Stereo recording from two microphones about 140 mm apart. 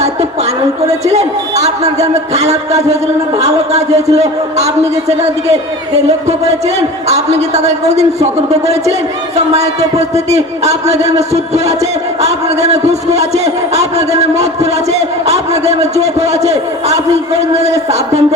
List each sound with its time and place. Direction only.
1.0 s a man's voice: 50° right (ahead or behind)
7.1 s a man's voice: 50° right (ahead or behind)
12.2 s a man's voice: 50° right (ahead or behind)
15.3 s a man's voice: 50° right (ahead or behind)